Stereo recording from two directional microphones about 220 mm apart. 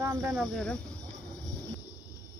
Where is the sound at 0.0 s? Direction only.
15° right (ahead or behind).